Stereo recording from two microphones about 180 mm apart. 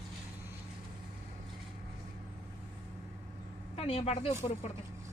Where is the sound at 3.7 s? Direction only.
35° left (ahead or behind).